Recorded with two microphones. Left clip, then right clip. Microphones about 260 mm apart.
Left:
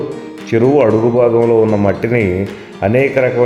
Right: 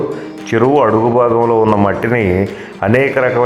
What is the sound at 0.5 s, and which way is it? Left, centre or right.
Speech, centre.